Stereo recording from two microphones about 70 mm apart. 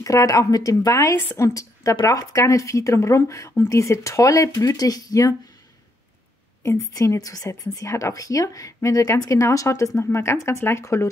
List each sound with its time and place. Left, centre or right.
0.0 s speech: left
6.6 s speech: left